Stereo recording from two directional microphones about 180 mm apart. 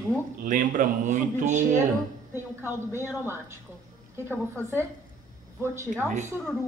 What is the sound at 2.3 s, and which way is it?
Speech, 15° left (ahead or behind).